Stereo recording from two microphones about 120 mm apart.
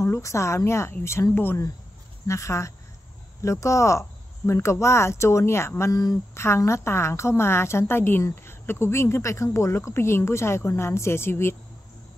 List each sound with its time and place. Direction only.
0.0 s speech: 25° left (ahead or behind)